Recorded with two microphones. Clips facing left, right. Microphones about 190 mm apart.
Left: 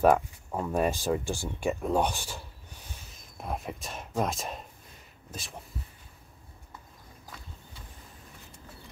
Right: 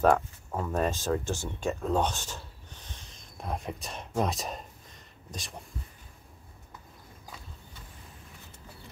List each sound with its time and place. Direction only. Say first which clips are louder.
0.0 s speech: left 1 dB; 10° left (ahead or behind)